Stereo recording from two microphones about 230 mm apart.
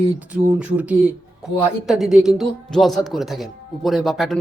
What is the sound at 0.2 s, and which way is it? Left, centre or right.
A man's voice, centre.